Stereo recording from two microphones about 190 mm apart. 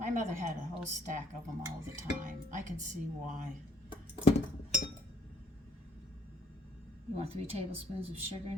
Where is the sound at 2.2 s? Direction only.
40° right (ahead or behind).